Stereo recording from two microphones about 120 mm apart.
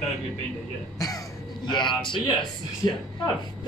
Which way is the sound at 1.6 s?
40° left (ahead or behind).